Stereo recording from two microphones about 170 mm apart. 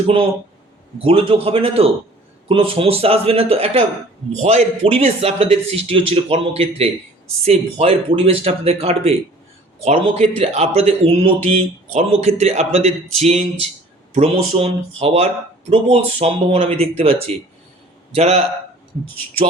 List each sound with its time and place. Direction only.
0.9 s a man's voice: 35° right (ahead or behind)